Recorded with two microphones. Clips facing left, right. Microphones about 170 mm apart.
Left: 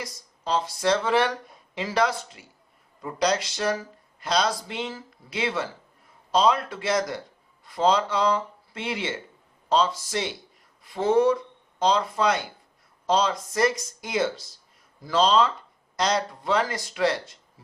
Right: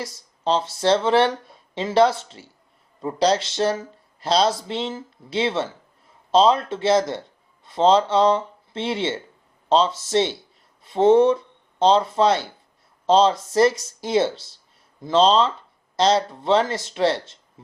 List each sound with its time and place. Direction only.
0.0 s a man's voice: 30° right (ahead or behind)